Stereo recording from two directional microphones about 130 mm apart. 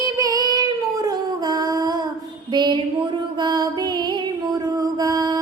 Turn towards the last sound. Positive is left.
turn(degrees=-30)  # may be behind; listen again after turning